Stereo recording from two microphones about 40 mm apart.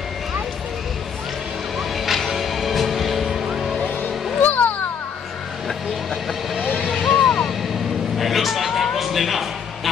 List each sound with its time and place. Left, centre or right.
1.8 s music: centre
4.4 s children playing: left
7.0 s vehicle: centre
8.2 s a sound: centre